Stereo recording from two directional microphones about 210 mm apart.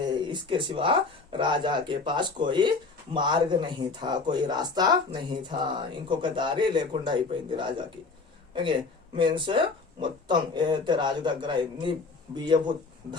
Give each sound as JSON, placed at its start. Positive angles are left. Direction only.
{"t": 0.0, "sound": "speech", "side_deg": -20}
{"t": 9.1, "sound": "speech", "side_deg": -25}